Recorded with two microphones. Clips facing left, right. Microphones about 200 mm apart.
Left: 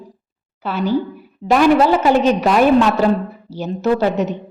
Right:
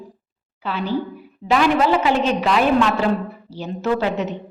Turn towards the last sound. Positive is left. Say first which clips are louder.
# left 4 dB
turn(degrees=40)  # may be behind; listen again after turning